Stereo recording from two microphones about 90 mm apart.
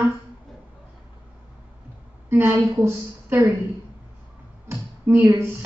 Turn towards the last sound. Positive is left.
turn(degrees=-25)  # may be behind; listen again after turning